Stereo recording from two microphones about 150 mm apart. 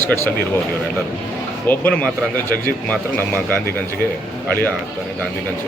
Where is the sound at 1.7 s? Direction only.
10° left (ahead or behind).